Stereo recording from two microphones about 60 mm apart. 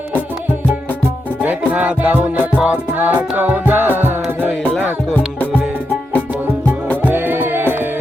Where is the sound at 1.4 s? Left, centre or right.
Right.